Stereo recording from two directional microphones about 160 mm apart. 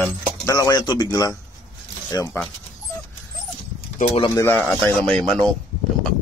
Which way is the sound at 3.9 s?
40° left (ahead or behind).